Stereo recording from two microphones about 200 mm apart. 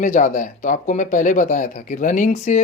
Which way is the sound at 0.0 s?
40° left (ahead or behind).